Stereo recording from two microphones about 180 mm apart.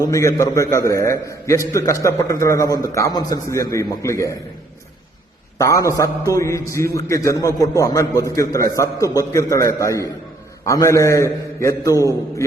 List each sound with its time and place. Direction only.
0.0 s a man's voice: 15° left (ahead or behind)
5.5 s a man's voice: 20° left (ahead or behind)